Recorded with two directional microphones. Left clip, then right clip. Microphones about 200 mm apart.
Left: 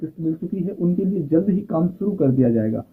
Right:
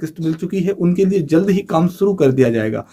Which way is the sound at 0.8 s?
20° right (ahead or behind).